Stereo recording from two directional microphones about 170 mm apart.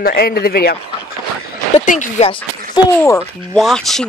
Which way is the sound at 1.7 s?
45° left (ahead or behind).